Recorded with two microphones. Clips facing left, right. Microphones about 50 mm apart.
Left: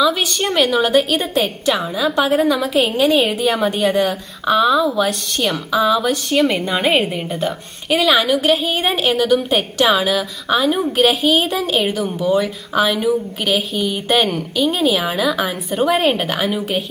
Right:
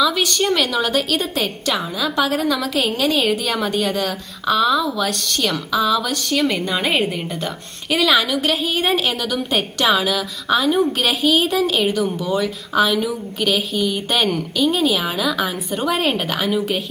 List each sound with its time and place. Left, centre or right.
0.0 s a woman's voice: centre
3.7 s a woman's voice: centre